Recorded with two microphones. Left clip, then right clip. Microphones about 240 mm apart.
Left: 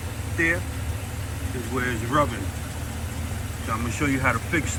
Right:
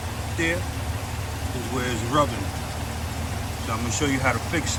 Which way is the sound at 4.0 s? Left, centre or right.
Centre.